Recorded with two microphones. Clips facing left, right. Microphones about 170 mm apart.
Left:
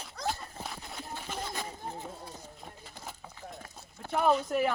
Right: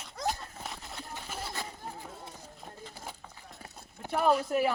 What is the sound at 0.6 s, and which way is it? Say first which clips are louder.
Horse: left 1 dB; centre (ahead or behind).